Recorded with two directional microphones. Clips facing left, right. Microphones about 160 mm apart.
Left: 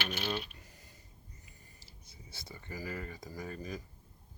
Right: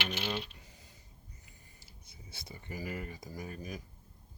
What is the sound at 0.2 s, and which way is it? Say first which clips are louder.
Coin: left 2 dB; 5° right (ahead or behind).